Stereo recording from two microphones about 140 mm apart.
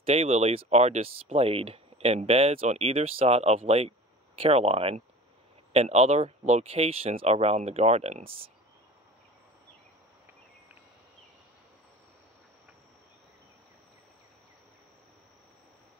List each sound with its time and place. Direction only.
0.0 s speech: 50° right (ahead or behind)